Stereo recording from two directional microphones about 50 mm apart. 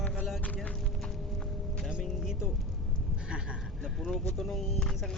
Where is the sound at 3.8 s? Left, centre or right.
Centre.